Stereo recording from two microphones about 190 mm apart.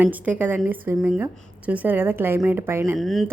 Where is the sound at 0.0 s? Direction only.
10° right (ahead or behind).